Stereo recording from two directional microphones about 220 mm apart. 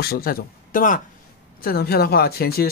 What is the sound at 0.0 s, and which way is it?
Speech, 45° left (ahead or behind).